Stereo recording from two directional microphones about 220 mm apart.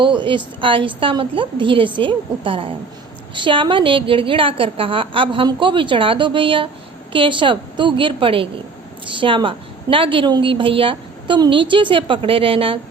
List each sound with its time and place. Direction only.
0.0 s a woman's voice: 20° right (ahead or behind)